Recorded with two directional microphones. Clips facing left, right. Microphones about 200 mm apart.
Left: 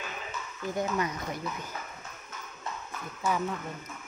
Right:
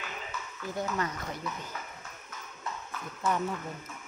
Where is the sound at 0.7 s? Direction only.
15° left (ahead or behind).